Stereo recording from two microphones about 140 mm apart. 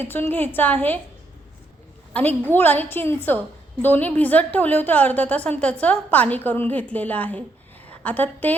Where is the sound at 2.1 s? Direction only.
10° left (ahead or behind).